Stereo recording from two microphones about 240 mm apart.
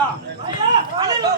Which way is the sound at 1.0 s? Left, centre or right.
Centre.